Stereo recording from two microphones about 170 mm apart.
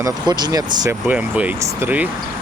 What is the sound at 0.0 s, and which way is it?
Speech, 25° right (ahead or behind).